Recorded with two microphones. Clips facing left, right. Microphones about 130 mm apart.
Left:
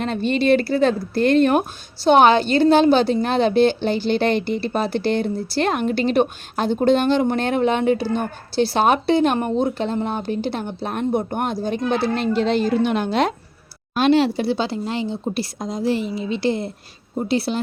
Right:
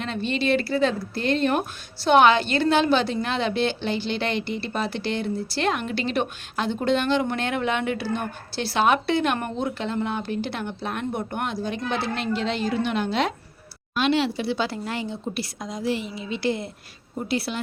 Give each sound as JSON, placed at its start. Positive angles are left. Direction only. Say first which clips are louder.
{"t": 0.0, "sound": "speech", "louder": "left 6 dB", "side_deg": 45}
{"t": 2.0, "sound": "a woman's voice", "louder": "left 3 dB", "side_deg": 35}